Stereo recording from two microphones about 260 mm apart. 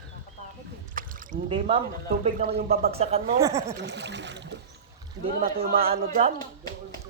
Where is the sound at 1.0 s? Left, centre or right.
Right.